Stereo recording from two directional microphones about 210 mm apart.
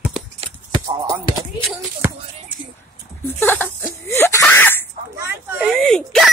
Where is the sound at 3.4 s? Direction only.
10° left (ahead or behind).